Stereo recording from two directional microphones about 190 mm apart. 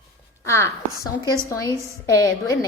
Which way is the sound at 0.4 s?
15° left (ahead or behind).